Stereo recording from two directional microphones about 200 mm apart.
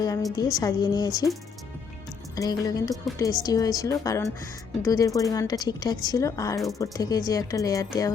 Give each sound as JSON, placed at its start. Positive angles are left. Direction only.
{"t": 0.0, "sound": "a woman's voice", "side_deg": 20}
{"t": 2.3, "sound": "a woman's voice", "side_deg": 20}